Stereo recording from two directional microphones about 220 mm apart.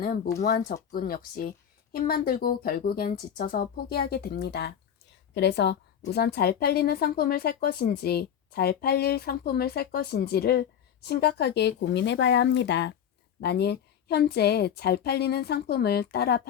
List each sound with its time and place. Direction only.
0.4 s speech: 45° left (ahead or behind)